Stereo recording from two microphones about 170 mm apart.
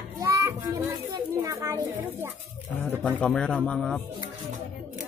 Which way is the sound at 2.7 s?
10° left (ahead or behind).